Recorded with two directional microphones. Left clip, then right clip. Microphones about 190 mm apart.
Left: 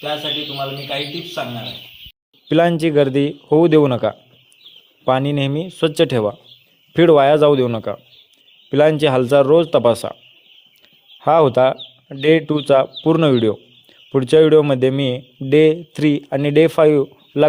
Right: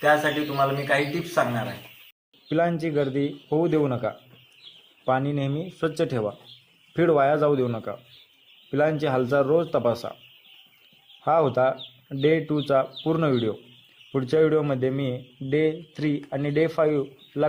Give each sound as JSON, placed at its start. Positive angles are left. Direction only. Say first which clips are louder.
{"t": 0.0, "sound": "a man's voice", "louder": "right 1 dB", "side_deg": -10}
{"t": 2.5, "sound": "speech", "louder": "left 9 dB", "side_deg": 55}
{"t": 11.2, "sound": "speech", "louder": "left 8 dB", "side_deg": 50}